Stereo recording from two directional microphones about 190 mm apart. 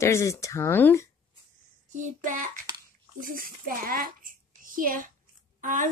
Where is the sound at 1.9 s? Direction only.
40° right (ahead or behind).